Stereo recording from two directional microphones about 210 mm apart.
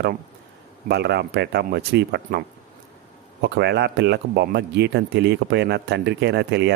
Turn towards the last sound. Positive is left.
turn(degrees=-55)  # may be behind; listen again after turning